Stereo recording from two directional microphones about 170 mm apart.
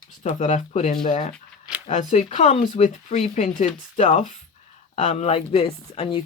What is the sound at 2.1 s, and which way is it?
Speech, 40° left (ahead or behind).